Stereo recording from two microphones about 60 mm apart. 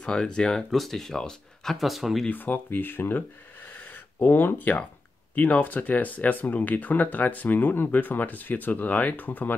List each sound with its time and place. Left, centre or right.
0.0 s speech: centre
0.7 s speech: centre
2.2 s speech: left
3.7 s a sound: left
4.3 s speech: left